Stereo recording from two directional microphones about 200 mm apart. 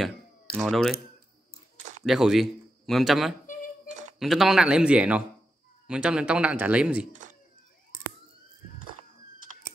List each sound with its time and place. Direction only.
0.6 s speech: centre (ahead or behind)
2.0 s speech: centre (ahead or behind)
3.4 s a sound: 40° left (ahead or behind)
4.2 s speech: centre (ahead or behind)
7.1 s cat: 40° right (ahead or behind)